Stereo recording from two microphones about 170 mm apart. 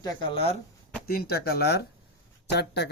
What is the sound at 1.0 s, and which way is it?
Speech, 65° left (ahead or behind).